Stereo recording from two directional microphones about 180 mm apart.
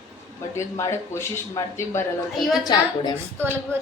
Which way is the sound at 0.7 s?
15° left (ahead or behind).